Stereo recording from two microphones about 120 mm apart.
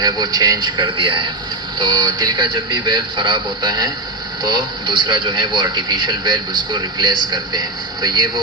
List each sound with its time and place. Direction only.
0.0 s a man's voice: 35° right (ahead or behind)
1.8 s a man's voice: 35° right (ahead or behind)